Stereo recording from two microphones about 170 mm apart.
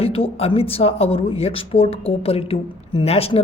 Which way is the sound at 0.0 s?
35° left (ahead or behind).